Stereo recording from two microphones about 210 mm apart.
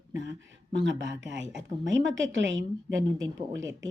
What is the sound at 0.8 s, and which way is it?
A woman's voice, 60° right (ahead or behind).